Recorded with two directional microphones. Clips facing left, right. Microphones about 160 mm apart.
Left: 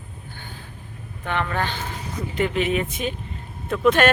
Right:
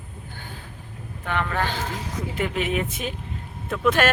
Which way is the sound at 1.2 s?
5° right (ahead or behind).